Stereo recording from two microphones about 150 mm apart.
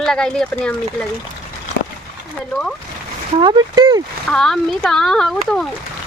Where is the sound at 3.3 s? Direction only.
30° right (ahead or behind).